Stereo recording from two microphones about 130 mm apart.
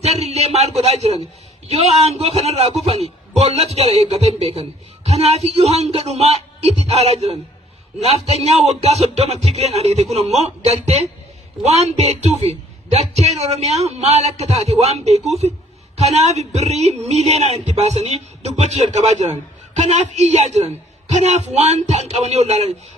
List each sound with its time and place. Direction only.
0.0 s a man's voice: 55° right (ahead or behind)